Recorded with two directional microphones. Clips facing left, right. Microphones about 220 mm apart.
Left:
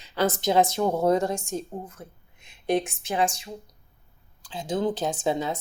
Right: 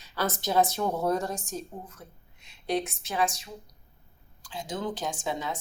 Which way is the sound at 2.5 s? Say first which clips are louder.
Left 4 dB; 15° left (ahead or behind).